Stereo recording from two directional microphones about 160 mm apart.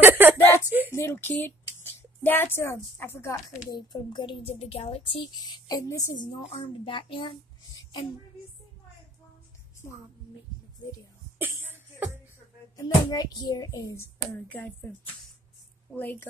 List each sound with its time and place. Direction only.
0.0 s chuckle: 10° right (ahead or behind)
0.7 s a sound: 10° right (ahead or behind)
0.9 s speech: 15° left (ahead or behind)
6.3 s speech: 35° left (ahead or behind)
11.3 s cough: 15° right (ahead or behind)
12.7 s speech: 25° left (ahead or behind)
14.3 s speech: 10° left (ahead or behind)